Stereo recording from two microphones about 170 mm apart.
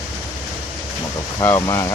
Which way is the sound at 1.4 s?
20° left (ahead or behind).